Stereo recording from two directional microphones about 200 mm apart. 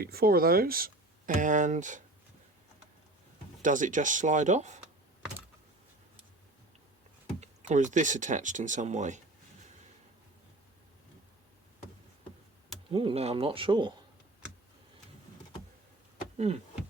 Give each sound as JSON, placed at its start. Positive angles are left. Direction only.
{"t": 0.0, "sound": "speech", "side_deg": -50}
{"t": 3.6, "sound": "speech", "side_deg": -40}
{"t": 7.3, "sound": "speech", "side_deg": -35}
{"t": 12.9, "sound": "speech", "side_deg": -25}